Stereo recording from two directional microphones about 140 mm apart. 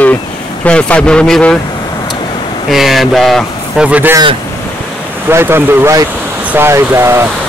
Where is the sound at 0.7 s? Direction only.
10° left (ahead or behind).